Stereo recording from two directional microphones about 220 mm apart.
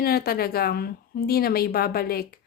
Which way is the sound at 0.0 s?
45° left (ahead or behind).